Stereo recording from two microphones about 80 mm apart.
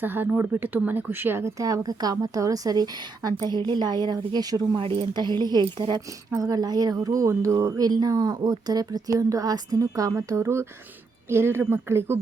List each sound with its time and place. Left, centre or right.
0.0 s speech: right
4.8 s a woman's voice: right
6.3 s speech: right
7.9 s speech: right
10.2 s a woman's voice: right